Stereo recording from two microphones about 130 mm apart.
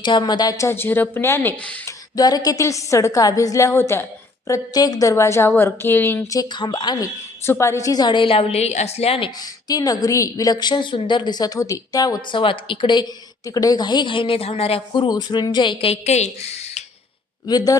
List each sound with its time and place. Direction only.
0.0 s a woman's voice: 35° left (ahead or behind); by 1.9 s 15° left (ahead or behind)
2.1 s a woman's voice: 30° left (ahead or behind)
6.4 s a woman's voice: 35° left (ahead or behind)
9.4 s a woman's voice: 30° left (ahead or behind); by 16.8 s 55° left (ahead or behind)
17.4 s a woman's voice: 30° left (ahead or behind)